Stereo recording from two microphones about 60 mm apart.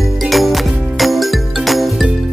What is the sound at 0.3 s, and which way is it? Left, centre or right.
Music, centre.